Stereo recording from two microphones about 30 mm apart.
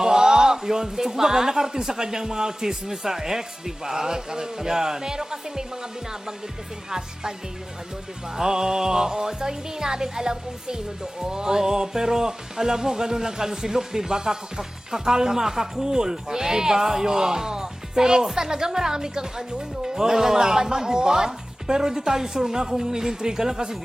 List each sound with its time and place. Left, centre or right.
0.0 s speech: centre
8.4 s speech: right